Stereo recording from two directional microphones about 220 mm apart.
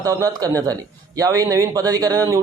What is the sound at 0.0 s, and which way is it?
Speech, 15° right (ahead or behind).